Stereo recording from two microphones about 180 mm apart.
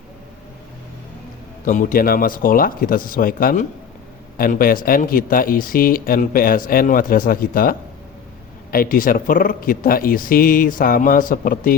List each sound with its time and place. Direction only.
1.6 s speech: 50° left (ahead or behind)